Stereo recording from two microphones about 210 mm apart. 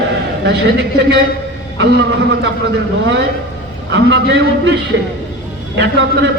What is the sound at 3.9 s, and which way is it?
Speech, 55° right (ahead or behind).